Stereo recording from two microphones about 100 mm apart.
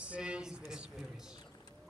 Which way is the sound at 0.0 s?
10° right (ahead or behind).